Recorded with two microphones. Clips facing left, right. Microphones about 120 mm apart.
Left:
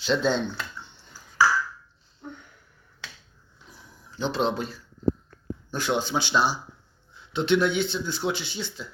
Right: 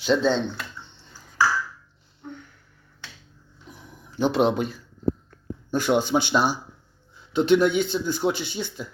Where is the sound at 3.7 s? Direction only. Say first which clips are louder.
Right 6 dB; 10° right (ahead or behind).